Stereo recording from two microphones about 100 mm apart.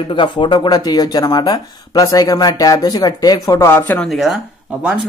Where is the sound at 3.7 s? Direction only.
20° left (ahead or behind).